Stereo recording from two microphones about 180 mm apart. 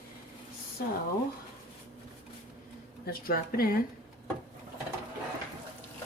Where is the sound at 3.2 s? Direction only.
55° left (ahead or behind).